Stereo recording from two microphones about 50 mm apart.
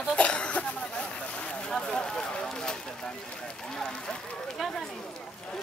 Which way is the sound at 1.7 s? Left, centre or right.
Centre.